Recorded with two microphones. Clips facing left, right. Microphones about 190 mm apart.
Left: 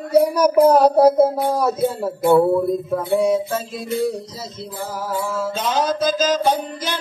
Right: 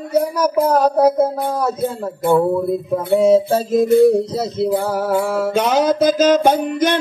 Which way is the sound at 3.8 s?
55° right (ahead or behind).